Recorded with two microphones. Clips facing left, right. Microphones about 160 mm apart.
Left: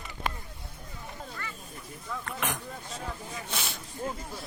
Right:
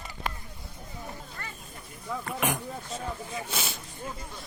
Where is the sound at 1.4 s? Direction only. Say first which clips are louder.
Left 1 dB; 40° right (ahead or behind).